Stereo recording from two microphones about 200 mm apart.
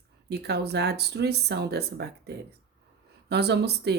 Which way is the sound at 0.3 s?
55° right (ahead or behind).